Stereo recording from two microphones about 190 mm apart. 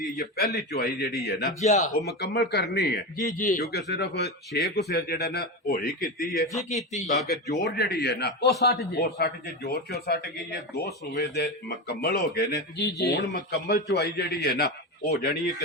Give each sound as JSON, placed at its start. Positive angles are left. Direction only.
{"t": 0.2, "sound": "a man's voice", "side_deg": 55}
{"t": 1.6, "sound": "speech", "side_deg": 40}
{"t": 2.0, "sound": "a man's voice", "side_deg": 60}
{"t": 6.9, "sound": "speech", "side_deg": 40}
{"t": 7.3, "sound": "a man's voice", "side_deg": 55}